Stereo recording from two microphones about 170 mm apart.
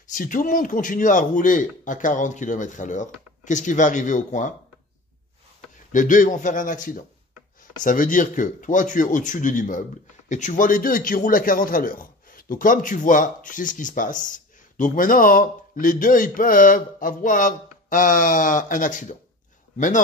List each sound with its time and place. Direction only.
0.1 s speech: 50° left (ahead or behind)
5.9 s speech: 50° left (ahead or behind)